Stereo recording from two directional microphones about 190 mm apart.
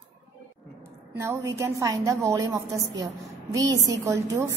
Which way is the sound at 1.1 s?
15° right (ahead or behind).